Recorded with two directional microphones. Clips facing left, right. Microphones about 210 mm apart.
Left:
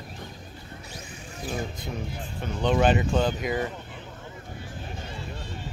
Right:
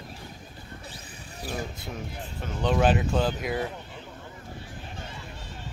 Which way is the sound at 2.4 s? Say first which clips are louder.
Left 1 dB; centre (ahead or behind).